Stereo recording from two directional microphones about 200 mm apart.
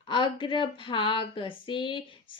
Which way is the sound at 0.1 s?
25° left (ahead or behind).